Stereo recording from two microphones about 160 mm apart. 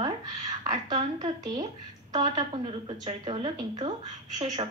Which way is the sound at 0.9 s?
30° right (ahead or behind).